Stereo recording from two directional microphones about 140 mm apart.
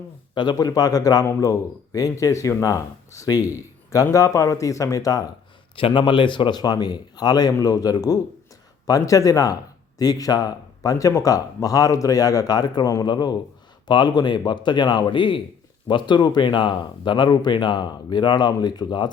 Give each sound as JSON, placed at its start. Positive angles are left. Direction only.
{"t": 0.3, "sound": "speech", "side_deg": 30}
{"t": 5.7, "sound": "speech", "side_deg": 35}